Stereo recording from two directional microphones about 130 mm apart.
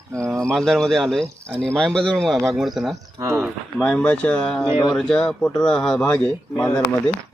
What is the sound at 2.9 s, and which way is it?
Speech, 20° right (ahead or behind).